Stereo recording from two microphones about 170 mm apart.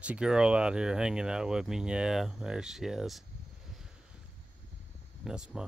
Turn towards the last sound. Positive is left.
turn(degrees=-5)  # may be behind; listen again after turning